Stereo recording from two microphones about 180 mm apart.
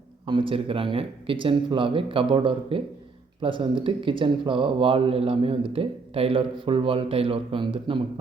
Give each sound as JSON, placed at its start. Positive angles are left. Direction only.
{"t": 0.3, "sound": "speech", "side_deg": -30}